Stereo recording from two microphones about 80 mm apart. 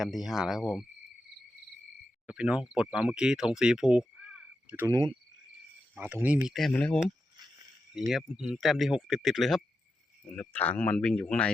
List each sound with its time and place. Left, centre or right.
0.0 s speech: centre
2.2 s speech: centre
4.9 s cricket: right
5.9 s speech: right
6.5 s speech: centre
6.7 s speech: centre
7.9 s speech: centre
10.5 s speech: centre